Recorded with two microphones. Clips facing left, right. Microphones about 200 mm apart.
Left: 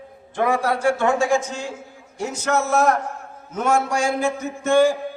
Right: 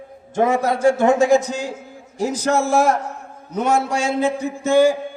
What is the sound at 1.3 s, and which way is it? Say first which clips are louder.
A man's voice: right 5 dB; 40° right (ahead or behind).